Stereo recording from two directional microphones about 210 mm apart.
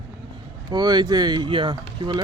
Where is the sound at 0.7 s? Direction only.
20° right (ahead or behind).